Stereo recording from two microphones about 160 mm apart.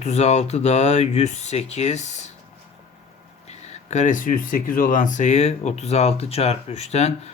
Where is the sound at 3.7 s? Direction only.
45° left (ahead or behind).